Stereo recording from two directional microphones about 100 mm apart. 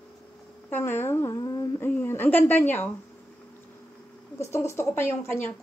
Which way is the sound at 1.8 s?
20° left (ahead or behind).